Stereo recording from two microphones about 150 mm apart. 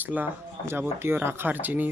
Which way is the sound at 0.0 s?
10° right (ahead or behind).